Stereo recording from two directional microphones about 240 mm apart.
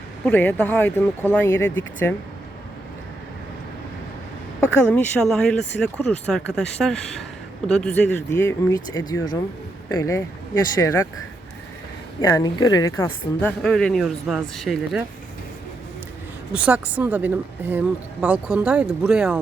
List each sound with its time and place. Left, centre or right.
0.3 s speech: centre
4.9 s a woman's voice: centre
12.2 s speech: centre
13.6 s a woman's voice: centre
16.5 s a woman's voice: centre